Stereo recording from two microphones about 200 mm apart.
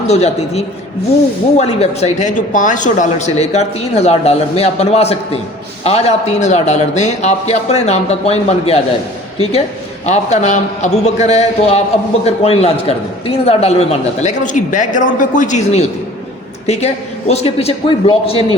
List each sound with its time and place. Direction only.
0.1 s a man's voice: 30° left (ahead or behind)